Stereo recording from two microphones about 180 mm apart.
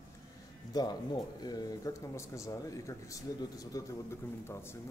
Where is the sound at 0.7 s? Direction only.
20° left (ahead or behind).